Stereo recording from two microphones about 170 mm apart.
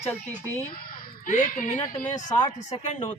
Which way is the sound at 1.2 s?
50° left (ahead or behind).